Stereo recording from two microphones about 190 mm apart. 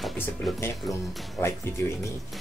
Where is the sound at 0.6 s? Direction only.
15° left (ahead or behind).